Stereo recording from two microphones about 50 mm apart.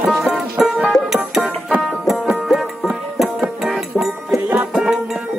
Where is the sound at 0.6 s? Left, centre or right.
Centre.